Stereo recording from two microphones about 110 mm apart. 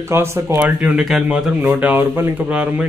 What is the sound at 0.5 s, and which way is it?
Speech, 10° right (ahead or behind).